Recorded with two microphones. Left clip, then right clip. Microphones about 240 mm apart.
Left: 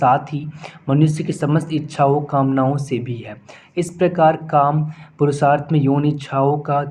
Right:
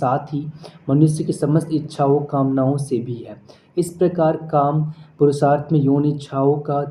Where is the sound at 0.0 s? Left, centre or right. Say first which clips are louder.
Left 5 dB; left.